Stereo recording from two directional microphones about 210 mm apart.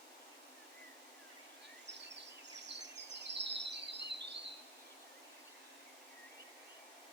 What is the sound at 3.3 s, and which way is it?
Bird vocalization, 55° right (ahead or behind).